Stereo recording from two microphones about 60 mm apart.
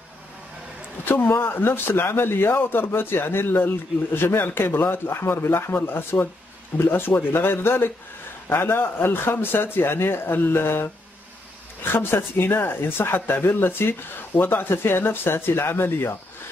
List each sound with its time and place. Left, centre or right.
1.0 s a man's voice: left